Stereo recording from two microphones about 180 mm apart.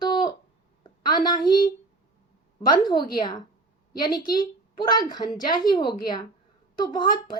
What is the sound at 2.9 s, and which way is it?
Speech, 55° left (ahead or behind).